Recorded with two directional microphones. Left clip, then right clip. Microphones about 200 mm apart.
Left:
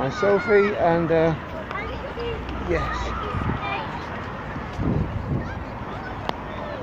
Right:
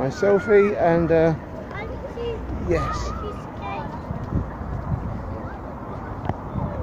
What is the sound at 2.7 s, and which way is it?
Speech, 25° right (ahead or behind).